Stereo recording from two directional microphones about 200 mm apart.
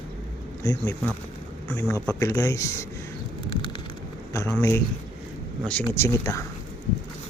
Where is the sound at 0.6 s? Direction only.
15° left (ahead or behind).